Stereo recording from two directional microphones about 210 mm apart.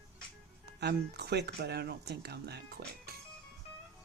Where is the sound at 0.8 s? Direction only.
50° right (ahead or behind).